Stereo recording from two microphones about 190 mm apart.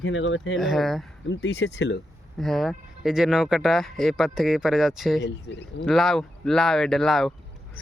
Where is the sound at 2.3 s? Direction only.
Centre (ahead or behind).